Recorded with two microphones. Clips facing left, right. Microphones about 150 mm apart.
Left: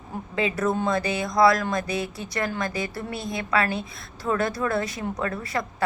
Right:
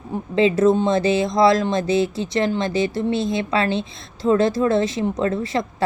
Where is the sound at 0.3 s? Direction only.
25° right (ahead or behind).